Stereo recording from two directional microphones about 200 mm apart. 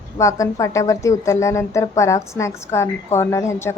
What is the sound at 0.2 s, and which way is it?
A woman's voice, 15° left (ahead or behind).